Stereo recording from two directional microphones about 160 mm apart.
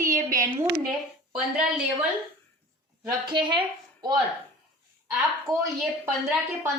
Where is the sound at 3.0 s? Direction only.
30° right (ahead or behind).